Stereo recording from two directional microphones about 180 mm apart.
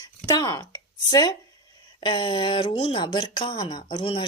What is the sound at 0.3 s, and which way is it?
Speech, 20° left (ahead or behind).